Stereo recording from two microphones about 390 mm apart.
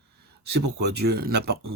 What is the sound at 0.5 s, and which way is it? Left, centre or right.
Speech, right.